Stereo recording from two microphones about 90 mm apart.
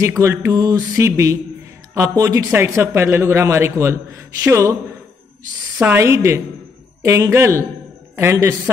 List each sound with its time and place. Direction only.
0.2 s a man's voice: 25° right (ahead or behind)
0.5 s mantra: 40° right (ahead or behind)
2.0 s a man's voice: 30° right (ahead or behind)
4.4 s mantra: 35° right (ahead or behind)
5.8 s a man's voice: 25° right (ahead or behind)
8.2 s mantra: 30° right (ahead or behind)